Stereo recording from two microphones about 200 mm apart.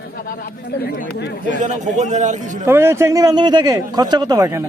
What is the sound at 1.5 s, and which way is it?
A man's voice, 35° right (ahead or behind).